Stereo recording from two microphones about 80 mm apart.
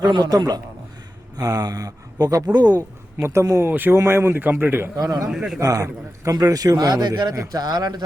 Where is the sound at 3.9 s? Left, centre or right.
Right.